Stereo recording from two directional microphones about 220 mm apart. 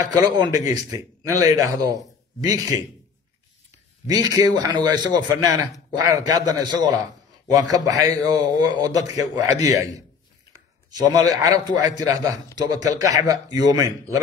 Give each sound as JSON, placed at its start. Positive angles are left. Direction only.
{"t": 0.0, "sound": "a man's voice", "side_deg": -15}
{"t": 4.1, "sound": "a man's voice", "side_deg": -20}